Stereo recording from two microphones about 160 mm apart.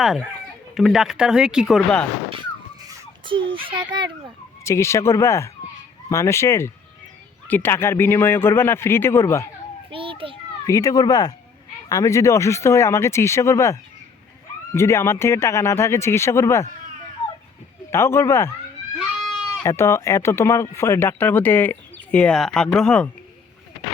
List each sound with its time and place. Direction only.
0.0 s speech: centre (ahead or behind)
2.8 s a child's voice: 25° right (ahead or behind)
4.6 s speech: 15° left (ahead or behind)
9.9 s children playing: 35° right (ahead or behind)
10.7 s speech: 20° left (ahead or behind)
17.9 s speech: 15° left (ahead or behind)
18.9 s goat: centre (ahead or behind)
19.6 s speech: 15° left (ahead or behind)